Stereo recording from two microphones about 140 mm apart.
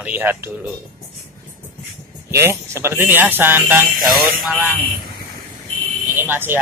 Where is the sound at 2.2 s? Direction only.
20° right (ahead or behind).